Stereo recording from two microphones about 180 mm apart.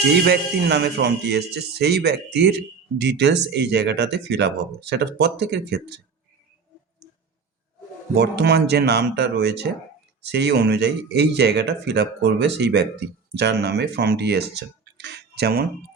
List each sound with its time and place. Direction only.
0.3 s speech: 70° right (ahead or behind)
8.1 s speech: 70° right (ahead or behind)